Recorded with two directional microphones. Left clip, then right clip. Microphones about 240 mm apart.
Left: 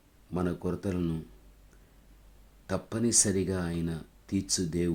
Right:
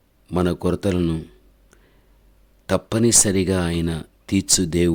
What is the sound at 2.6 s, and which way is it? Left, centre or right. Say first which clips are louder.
Speech: right 12 dB; right.